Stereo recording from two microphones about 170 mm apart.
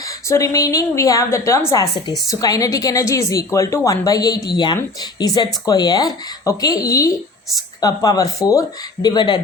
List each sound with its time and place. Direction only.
0.3 s a woman's voice: 20° left (ahead or behind)